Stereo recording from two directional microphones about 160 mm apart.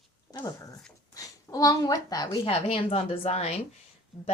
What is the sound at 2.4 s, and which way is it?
Speech, 40° left (ahead or behind).